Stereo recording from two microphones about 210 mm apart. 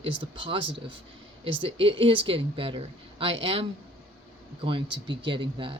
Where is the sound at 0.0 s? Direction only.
25° right (ahead or behind).